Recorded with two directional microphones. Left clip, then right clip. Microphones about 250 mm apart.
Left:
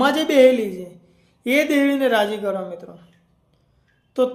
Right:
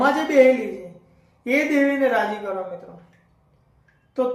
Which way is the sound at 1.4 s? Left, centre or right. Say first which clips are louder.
Left 2 dB; left.